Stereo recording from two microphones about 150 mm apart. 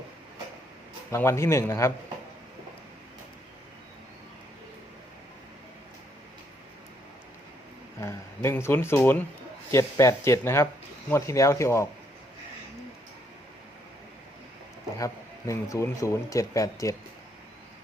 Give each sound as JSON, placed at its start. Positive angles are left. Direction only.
{"t": 1.1, "sound": "speech", "side_deg": 15}
{"t": 8.0, "sound": "speech", "side_deg": 15}
{"t": 14.9, "sound": "speech", "side_deg": 20}